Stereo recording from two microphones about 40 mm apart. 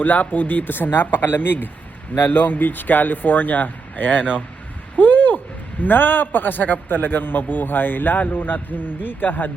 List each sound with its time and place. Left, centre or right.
0.0 s speech: left
4.9 s a sound: left
5.8 s speech: left